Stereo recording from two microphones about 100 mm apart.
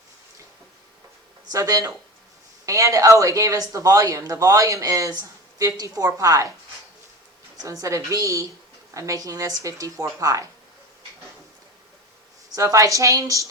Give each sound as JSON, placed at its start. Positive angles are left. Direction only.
{"t": 1.5, "sound": "speech", "side_deg": -40}
{"t": 7.6, "sound": "speech", "side_deg": -35}
{"t": 12.5, "sound": "speech", "side_deg": -35}